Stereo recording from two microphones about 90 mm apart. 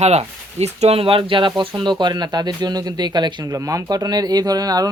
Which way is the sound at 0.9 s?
85° right.